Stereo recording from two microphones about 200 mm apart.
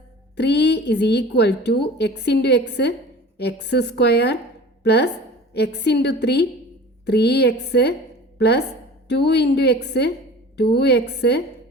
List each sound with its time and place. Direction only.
0.3 s a woman's voice: 60° left (ahead or behind)